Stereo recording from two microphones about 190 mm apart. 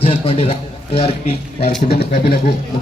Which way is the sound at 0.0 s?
30° left (ahead or behind).